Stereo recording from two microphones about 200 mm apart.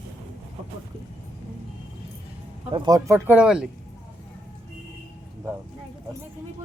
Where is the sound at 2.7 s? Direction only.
20° right (ahead or behind).